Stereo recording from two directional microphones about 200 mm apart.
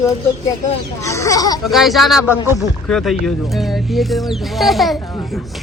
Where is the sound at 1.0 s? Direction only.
15° left (ahead or behind).